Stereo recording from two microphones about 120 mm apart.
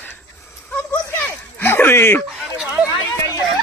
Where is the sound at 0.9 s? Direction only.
15° left (ahead or behind).